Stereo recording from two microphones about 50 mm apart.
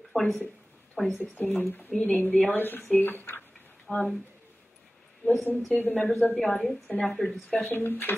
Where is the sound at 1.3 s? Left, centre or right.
Left.